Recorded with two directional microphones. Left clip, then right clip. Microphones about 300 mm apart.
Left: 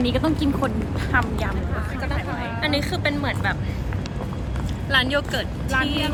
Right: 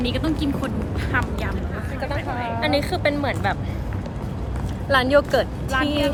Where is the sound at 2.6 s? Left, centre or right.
Centre.